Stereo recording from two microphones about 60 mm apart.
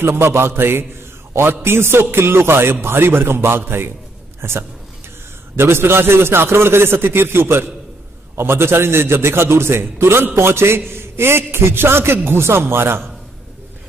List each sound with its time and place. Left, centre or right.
0.0 s a man's voice: right